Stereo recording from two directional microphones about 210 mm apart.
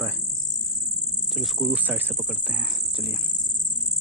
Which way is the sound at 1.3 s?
Centre (ahead or behind).